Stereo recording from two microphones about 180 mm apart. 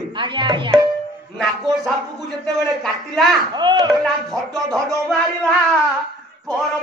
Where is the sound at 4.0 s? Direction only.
Centre (ahead or behind).